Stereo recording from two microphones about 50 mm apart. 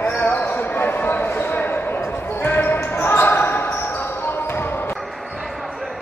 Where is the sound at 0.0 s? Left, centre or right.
Left.